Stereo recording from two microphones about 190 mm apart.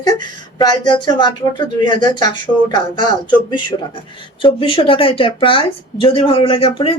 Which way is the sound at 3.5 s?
25° left (ahead or behind).